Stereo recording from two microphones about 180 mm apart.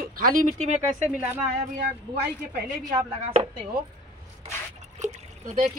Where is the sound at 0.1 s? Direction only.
50° right (ahead or behind).